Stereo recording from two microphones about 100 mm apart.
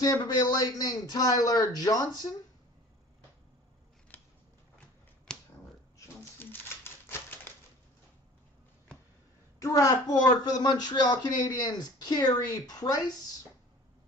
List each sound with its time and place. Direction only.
0.0 s a man's voice: 40° left (ahead or behind)
4.1 s scissors: 15° left (ahead or behind)
4.7 s a sound: 10° left (ahead or behind)
6.4 s typewriter: 20° left (ahead or behind)
9.6 s a man's voice: 35° left (ahead or behind)
10.4 s speech: 45° left (ahead or behind)